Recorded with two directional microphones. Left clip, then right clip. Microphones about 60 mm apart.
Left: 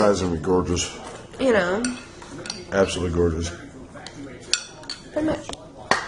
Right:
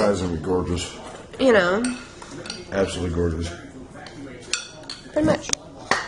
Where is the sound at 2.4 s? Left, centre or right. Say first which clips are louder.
Left 3 dB; left.